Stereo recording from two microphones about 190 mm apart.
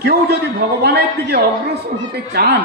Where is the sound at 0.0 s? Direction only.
55° right (ahead or behind).